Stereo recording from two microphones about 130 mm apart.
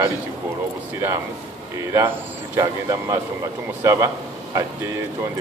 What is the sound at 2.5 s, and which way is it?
A man's voice, 25° right (ahead or behind).